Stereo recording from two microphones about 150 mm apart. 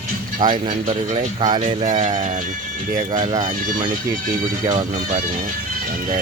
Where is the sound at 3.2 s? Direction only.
30° right (ahead or behind).